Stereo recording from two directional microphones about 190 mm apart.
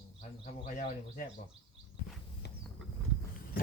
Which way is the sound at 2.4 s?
65° left (ahead or behind).